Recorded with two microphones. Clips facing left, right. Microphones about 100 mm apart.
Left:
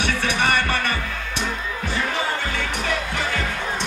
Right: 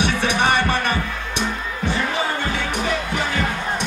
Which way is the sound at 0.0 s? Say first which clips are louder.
Right 3 dB; 20° right (ahead or behind).